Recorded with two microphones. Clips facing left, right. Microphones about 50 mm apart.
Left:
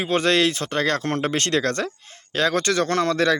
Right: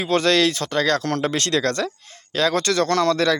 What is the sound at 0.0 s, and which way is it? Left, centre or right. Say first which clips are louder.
A man's voice: right 1 dB; left.